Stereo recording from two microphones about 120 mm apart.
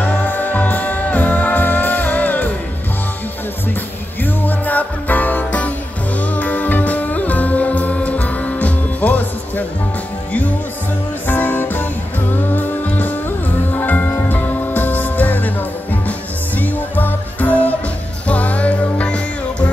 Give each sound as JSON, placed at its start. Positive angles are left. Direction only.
{"t": 0.0, "sound": "music", "side_deg": 15}
{"t": 4.2, "sound": "music", "side_deg": 15}
{"t": 11.2, "sound": "music", "side_deg": 15}